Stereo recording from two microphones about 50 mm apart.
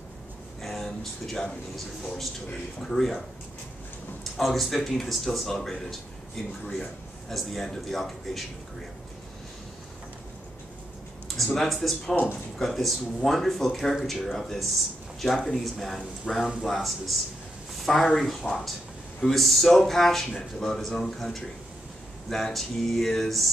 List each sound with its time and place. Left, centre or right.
0.6 s a sound: centre
2.8 s speech: centre
11.2 s speech: centre
20.2 s speech: centre